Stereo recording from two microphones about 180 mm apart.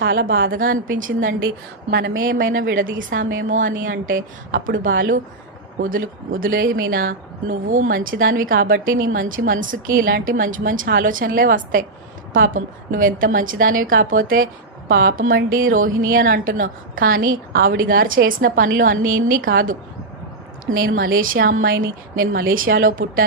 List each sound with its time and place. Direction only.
0.0 s speech: 65° right (ahead or behind)
1.9 s speech: 60° right (ahead or behind)